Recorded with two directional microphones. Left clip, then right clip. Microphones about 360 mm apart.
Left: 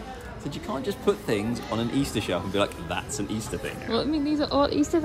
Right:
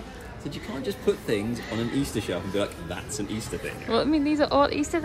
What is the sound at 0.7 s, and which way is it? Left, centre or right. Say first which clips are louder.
A woman's voice: left 1 dB; centre.